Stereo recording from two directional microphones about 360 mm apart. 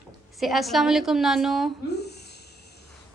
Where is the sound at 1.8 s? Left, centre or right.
Left.